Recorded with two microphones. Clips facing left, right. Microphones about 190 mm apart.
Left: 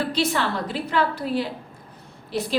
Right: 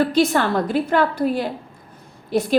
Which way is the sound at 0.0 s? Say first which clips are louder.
Right 6 dB; 45° right (ahead or behind).